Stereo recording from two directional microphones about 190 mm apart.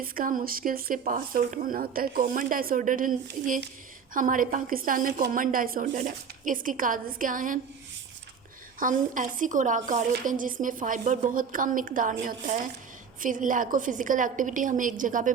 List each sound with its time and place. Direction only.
0.0 s speech: 50° right (ahead or behind)
8.8 s speech: 45° right (ahead or behind)